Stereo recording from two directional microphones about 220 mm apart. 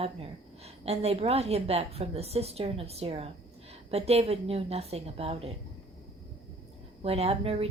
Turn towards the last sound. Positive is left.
turn(degrees=-25)  # may be behind; listen again after turning